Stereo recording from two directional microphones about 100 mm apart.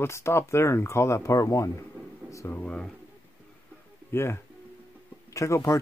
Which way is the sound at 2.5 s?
10° left (ahead or behind).